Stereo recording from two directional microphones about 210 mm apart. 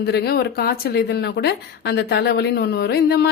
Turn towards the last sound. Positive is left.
turn(degrees=50)  # may be behind; listen again after turning